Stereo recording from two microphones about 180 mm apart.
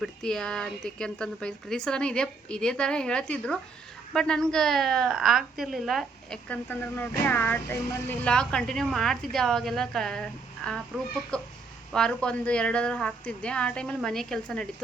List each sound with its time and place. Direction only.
0.0 s a woman's voice: 5° left (ahead or behind)